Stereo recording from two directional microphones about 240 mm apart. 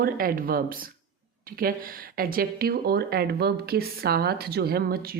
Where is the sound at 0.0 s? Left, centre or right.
Right.